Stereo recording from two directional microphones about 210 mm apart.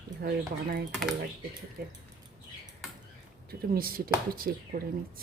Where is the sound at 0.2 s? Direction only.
45° right (ahead or behind).